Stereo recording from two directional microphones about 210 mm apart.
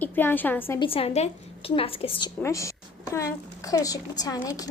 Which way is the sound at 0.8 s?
25° left (ahead or behind).